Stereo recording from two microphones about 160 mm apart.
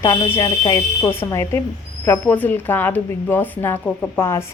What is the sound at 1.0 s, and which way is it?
A woman's voice, 15° left (ahead or behind).